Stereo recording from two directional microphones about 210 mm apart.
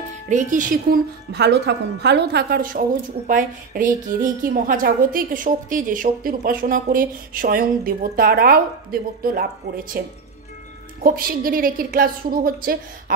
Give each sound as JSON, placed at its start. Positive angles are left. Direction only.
{"t": 0.3, "sound": "a woman's voice", "side_deg": -40}